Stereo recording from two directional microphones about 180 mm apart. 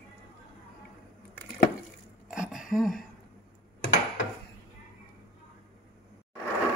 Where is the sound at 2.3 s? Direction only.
5° right (ahead or behind).